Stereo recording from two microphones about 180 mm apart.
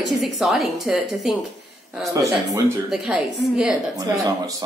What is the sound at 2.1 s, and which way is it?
Speech, 20° right (ahead or behind).